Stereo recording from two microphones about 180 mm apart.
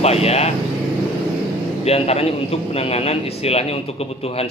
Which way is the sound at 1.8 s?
35° left (ahead or behind).